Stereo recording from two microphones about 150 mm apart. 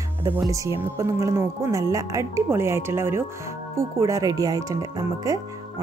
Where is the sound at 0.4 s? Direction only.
20° right (ahead or behind).